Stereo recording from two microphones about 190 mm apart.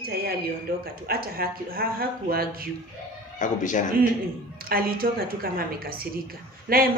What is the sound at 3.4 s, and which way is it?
Speech, 40° left (ahead or behind).